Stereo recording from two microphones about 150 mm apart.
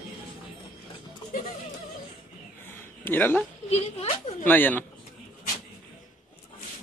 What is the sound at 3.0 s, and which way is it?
Speech, 15° left (ahead or behind).